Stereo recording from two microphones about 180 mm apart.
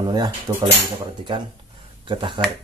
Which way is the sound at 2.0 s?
25° right (ahead or behind).